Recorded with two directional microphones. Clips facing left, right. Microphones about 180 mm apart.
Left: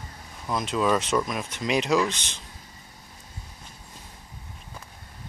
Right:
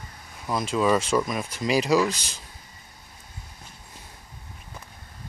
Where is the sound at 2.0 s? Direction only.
40° right (ahead or behind).